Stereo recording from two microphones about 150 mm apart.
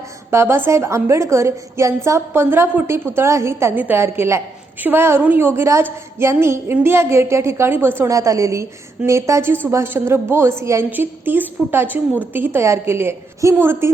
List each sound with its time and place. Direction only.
0.3 s a woman's voice: 15° right (ahead or behind)